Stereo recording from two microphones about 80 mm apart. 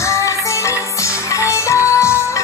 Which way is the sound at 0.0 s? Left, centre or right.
Left.